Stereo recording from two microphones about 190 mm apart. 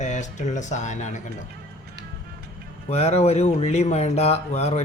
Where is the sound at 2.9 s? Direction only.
35° left (ahead or behind).